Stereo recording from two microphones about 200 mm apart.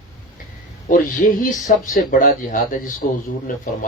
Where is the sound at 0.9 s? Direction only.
45° left (ahead or behind).